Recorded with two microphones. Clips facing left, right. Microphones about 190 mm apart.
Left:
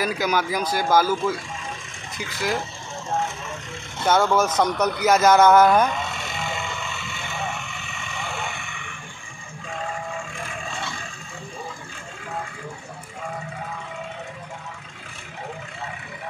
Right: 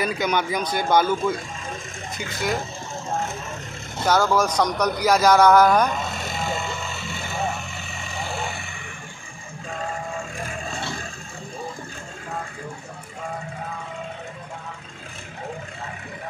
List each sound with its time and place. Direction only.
0.0 s speech: 5° left (ahead or behind)
4.3 s speech: 5° left (ahead or behind)
5.9 s vehicle: 40° right (ahead or behind)
10.3 s vehicle: 40° right (ahead or behind)